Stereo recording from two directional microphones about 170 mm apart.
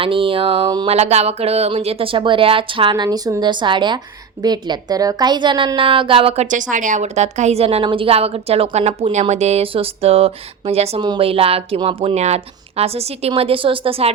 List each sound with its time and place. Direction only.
0.0 s a woman's voice: 30° right (ahead or behind)
0.9 s a woman's voice: 40° right (ahead or behind)